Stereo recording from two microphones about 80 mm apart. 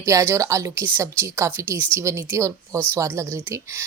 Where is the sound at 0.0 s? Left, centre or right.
Right.